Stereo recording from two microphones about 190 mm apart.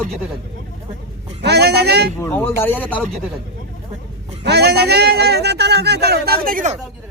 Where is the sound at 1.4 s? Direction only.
60° right (ahead or behind).